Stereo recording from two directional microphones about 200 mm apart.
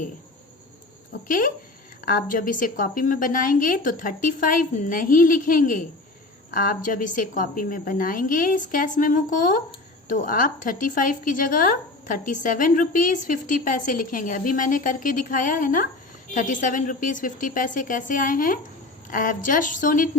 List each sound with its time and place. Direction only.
1.3 s a woman's voice: 45° left (ahead or behind)